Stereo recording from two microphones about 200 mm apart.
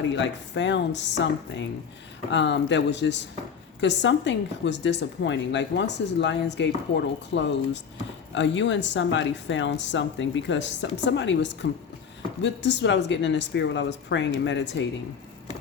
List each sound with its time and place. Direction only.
0.2 s speech: 65° left (ahead or behind)
2.3 s speech: 60° left (ahead or behind)